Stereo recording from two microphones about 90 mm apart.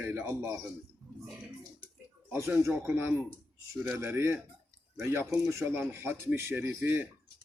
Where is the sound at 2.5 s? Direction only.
25° right (ahead or behind).